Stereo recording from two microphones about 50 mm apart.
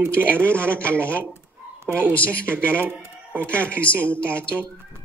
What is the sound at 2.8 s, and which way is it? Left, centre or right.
Speech, right.